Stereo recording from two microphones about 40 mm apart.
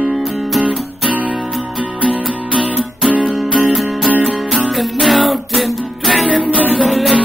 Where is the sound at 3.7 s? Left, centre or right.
Centre.